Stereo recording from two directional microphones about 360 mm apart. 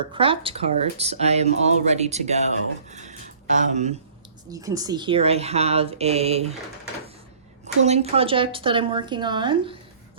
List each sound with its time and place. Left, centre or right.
0.1 s speech: centre
7.6 s speech: centre